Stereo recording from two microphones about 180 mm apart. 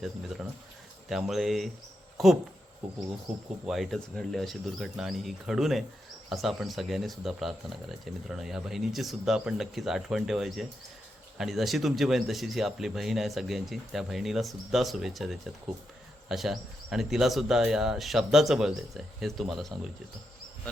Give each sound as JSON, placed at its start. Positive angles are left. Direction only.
{"t": 0.0, "sound": "speech", "side_deg": 0}
{"t": 3.7, "sound": "speech", "side_deg": 0}